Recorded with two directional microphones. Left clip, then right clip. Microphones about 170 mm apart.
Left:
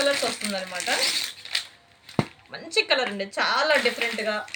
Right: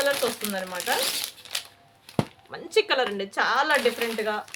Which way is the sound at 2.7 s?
55° right (ahead or behind).